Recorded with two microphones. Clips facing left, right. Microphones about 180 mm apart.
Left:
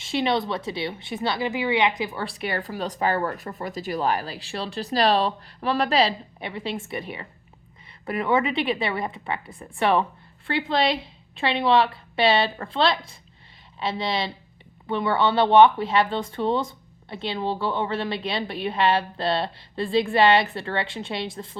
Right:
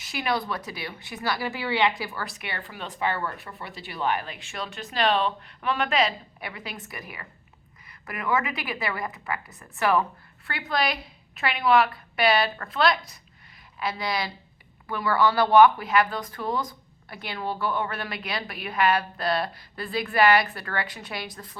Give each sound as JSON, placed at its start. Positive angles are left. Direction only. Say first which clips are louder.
{"t": 0.0, "sound": "speech", "louder": "left 5 dB", "side_deg": 25}